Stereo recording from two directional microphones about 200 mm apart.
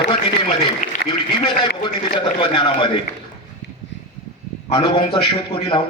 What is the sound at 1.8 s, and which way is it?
A man's voice, 25° left (ahead or behind).